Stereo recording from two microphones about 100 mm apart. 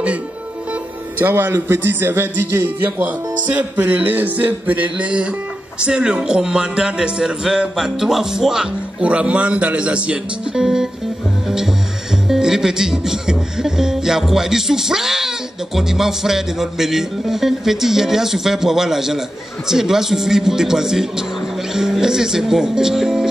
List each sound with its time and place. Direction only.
1.1 s a man's voice: 20° right (ahead or behind); by 10.9 s 5° right (ahead or behind)
11.4 s music: 5° right (ahead or behind)
12.3 s speech: 5° right (ahead or behind)